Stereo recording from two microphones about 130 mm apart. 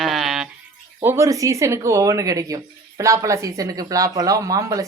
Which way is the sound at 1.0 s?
20° right (ahead or behind).